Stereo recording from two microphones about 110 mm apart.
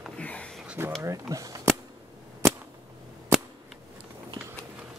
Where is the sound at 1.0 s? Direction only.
30° right (ahead or behind).